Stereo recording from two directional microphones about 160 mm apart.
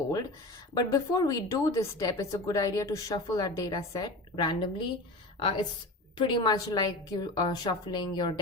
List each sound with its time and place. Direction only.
0.7 s a woman's voice: 20° left (ahead or behind)